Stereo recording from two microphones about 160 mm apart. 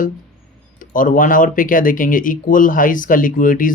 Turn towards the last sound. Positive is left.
turn(degrees=55)  # may be behind; listen again after turning